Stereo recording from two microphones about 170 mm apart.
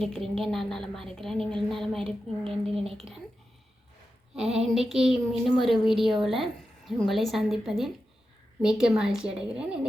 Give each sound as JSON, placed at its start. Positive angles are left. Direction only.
{"t": 0.0, "sound": "a woman's voice", "side_deg": 0}
{"t": 4.4, "sound": "a woman's voice", "side_deg": 0}